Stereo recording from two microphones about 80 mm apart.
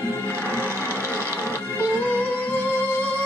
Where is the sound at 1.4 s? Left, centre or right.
Right.